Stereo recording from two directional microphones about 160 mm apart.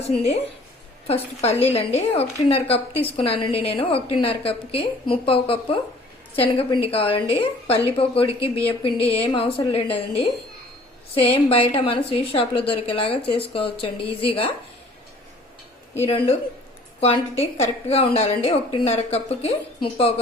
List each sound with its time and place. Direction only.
0.1 s a woman's voice: 45° left (ahead or behind)
16.0 s a woman's voice: 35° left (ahead or behind)